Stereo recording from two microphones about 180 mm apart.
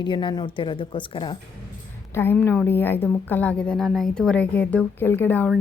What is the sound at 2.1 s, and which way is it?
A woman's voice, 10° left (ahead or behind).